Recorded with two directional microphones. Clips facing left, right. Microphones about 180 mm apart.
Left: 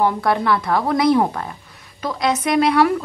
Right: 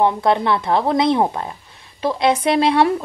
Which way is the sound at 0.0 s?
25° right (ahead or behind).